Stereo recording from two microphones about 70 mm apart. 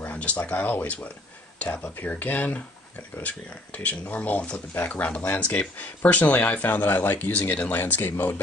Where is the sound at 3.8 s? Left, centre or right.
Centre.